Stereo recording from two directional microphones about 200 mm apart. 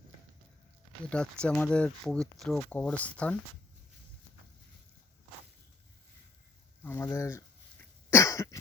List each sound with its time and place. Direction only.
1.1 s speech: 5° left (ahead or behind)
6.8 s cough: 10° left (ahead or behind)